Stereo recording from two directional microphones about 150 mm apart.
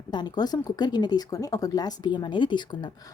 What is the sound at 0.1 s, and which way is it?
Speech, 30° left (ahead or behind).